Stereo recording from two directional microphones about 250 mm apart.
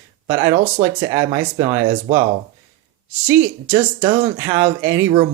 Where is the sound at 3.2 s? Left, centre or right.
Centre.